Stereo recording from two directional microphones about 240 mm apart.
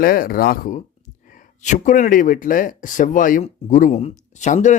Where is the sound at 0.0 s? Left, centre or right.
Left.